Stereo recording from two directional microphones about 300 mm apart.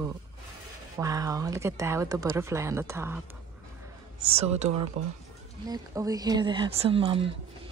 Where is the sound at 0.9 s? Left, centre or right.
Centre.